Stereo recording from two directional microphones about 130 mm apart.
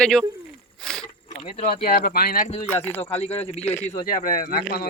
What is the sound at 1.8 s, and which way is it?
Speech, 90° left.